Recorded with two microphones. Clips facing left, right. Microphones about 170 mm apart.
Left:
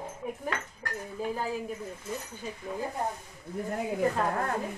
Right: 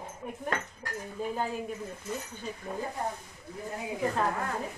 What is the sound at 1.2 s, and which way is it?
Speech, 5° left (ahead or behind).